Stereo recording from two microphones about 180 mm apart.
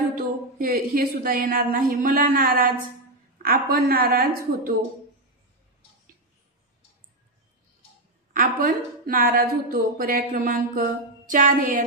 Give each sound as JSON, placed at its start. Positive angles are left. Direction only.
{"t": 0.6, "sound": "a woman's voice", "side_deg": -55}
{"t": 8.3, "sound": "a woman's voice", "side_deg": -50}